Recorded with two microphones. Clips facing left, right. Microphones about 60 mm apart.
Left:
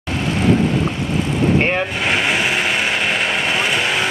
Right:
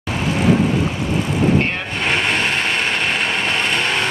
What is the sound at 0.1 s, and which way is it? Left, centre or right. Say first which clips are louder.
Vehicle: even; centre.